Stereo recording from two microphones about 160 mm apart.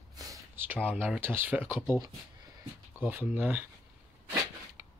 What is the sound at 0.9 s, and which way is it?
Speech, 10° right (ahead or behind).